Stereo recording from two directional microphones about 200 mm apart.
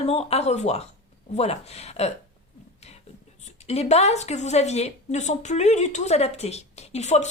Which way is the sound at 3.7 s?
30° left (ahead or behind).